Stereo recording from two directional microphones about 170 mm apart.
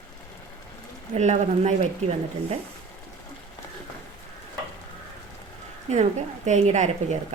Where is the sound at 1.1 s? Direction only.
40° right (ahead or behind).